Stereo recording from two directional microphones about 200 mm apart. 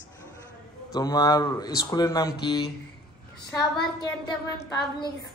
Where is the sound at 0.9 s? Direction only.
20° left (ahead or behind).